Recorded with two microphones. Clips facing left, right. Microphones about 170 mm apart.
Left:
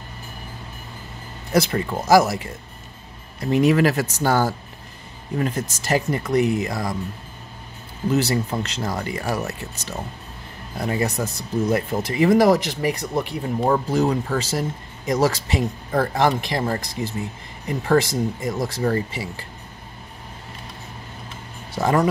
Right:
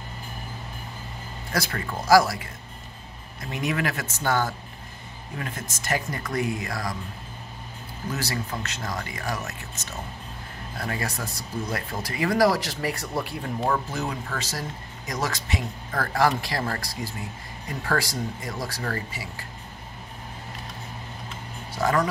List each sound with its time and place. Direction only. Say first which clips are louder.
1.5 s speech: left 9 dB; 25° left (ahead or behind)
3.3 s speech: left 11 dB; 35° left (ahead or behind)
5.9 s speech: left 7 dB; 25° left (ahead or behind)
8.1 s speech: left 10 dB; 25° left (ahead or behind)
10.8 s speech: left 8 dB; 20° left (ahead or behind)
13.8 s speech: left 10 dB; 35° left (ahead or behind)
21.7 s speech: left 4 dB; 25° left (ahead or behind)